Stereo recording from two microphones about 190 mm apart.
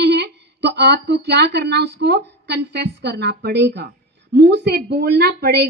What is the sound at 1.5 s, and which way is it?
A woman's voice, 60° right (ahead or behind).